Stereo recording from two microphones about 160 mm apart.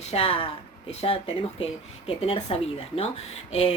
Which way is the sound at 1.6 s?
35° left (ahead or behind).